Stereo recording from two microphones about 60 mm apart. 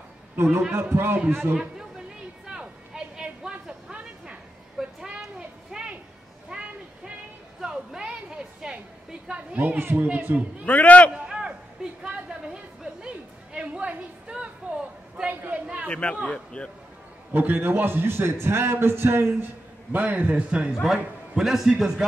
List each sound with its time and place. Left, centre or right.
0.5 s a man's voice: right
2.4 s a sound: centre
9.6 s a man's voice: right
10.6 s a man's voice: left
11.2 s a sound: centre
15.6 s chatter: centre
15.9 s a man's voice: centre
17.3 s a man's voice: right
19.9 s a man's voice: right
20.8 s a man's voice: centre